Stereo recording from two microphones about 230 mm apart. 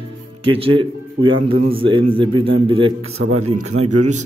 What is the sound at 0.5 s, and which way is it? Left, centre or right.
A man's voice, right.